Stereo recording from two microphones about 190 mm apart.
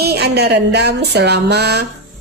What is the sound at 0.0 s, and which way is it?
Speech, 60° right (ahead or behind).